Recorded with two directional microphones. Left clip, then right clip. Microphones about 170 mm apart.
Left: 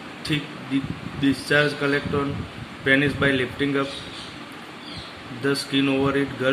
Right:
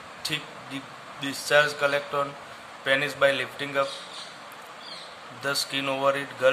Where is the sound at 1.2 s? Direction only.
40° right (ahead or behind).